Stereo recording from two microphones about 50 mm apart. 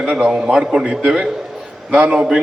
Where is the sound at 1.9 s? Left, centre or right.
Right.